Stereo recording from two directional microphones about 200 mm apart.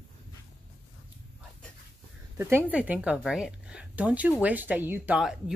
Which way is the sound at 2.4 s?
10° right (ahead or behind).